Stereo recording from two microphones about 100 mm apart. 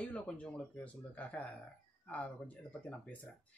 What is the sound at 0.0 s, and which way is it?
Speech, 15° left (ahead or behind).